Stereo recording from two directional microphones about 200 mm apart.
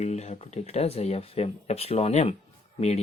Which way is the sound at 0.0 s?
35° left (ahead or behind).